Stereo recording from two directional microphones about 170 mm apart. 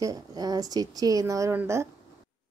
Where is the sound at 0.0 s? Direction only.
20° right (ahead or behind).